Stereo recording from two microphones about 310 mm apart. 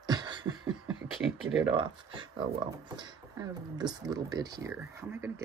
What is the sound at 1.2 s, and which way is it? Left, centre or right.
Speech, centre.